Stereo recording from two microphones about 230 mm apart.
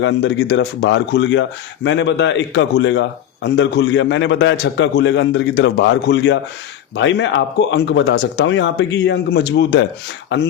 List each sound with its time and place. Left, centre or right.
0.0 s speech: left